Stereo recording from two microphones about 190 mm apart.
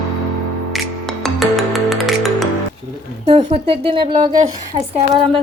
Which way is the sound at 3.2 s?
35° right (ahead or behind).